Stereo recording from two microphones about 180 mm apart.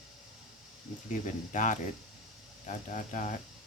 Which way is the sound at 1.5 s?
45° left (ahead or behind).